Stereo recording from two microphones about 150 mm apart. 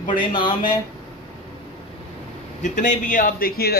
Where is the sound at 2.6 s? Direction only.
55° left (ahead or behind); by 3.7 s 85° left.